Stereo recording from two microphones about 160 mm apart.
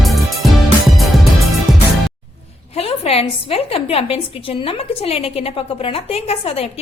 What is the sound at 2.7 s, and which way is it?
A woman's voice, 40° left (ahead or behind).